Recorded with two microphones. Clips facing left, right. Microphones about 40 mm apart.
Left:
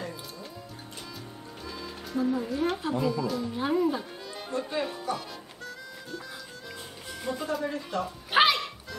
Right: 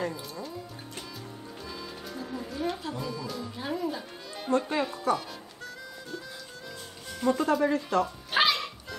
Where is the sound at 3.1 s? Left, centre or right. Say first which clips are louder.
Left 6 dB; centre.